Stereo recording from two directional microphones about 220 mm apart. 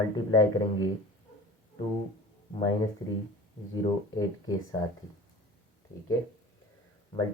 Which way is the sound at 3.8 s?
20° left (ahead or behind).